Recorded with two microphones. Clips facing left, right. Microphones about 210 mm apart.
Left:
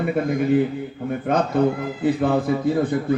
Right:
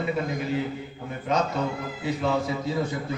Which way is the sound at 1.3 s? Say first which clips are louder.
Left 6 dB; 55° left (ahead or behind).